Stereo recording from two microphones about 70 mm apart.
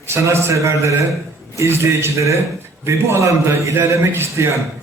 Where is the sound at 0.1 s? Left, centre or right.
Right.